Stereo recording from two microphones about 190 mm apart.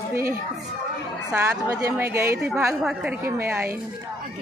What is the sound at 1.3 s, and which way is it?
Speech, 10° right (ahead or behind).